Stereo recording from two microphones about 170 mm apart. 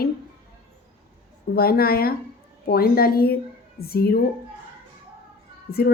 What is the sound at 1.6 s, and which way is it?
A woman's voice, 65° left (ahead or behind).